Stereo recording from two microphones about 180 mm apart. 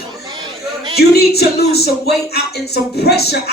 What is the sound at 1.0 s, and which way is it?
Speech, 60° left (ahead or behind).